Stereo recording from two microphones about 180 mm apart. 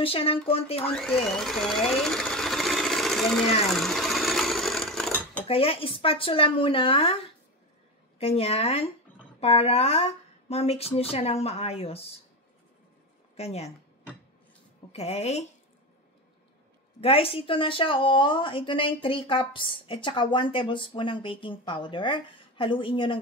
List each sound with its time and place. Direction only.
0.0 s speech: 30° left (ahead or behind)
0.9 s speech: centre (ahead or behind)
3.7 s sewing machine: centre (ahead or behind)
5.5 s speech: 30° left (ahead or behind)
8.2 s speech: 35° left (ahead or behind)
13.4 s speech: 35° left (ahead or behind)
14.9 s speech: 35° left (ahead or behind)
17.0 s speech: 30° left (ahead or behind)